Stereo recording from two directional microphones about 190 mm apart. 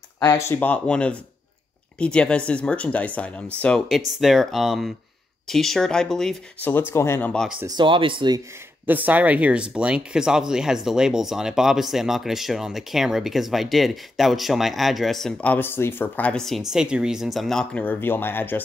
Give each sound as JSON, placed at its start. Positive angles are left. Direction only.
{"t": 0.2, "sound": "speech", "side_deg": 15}
{"t": 7.6, "sound": "speech", "side_deg": -25}
{"t": 8.8, "sound": "speech", "side_deg": -10}